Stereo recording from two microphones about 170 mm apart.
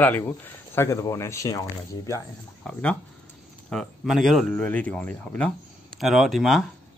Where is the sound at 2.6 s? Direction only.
5° left (ahead or behind).